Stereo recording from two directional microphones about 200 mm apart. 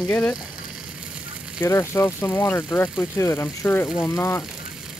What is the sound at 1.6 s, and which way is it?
Speech, 15° left (ahead or behind).